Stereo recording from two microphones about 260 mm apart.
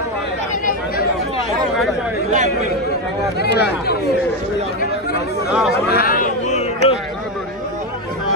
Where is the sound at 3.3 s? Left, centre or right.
Left.